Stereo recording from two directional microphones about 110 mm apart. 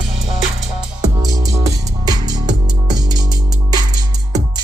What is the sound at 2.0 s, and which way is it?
Music, 40° right (ahead or behind).